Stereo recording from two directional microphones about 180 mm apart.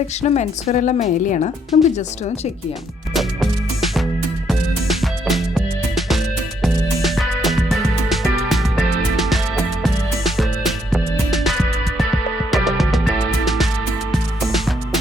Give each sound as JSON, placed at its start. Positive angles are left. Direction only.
{"t": 0.2, "sound": "speech", "side_deg": 40}
{"t": 3.2, "sound": "music", "side_deg": 0}